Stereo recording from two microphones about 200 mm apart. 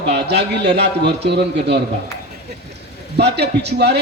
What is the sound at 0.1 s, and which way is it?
A man's voice, 55° right (ahead or behind).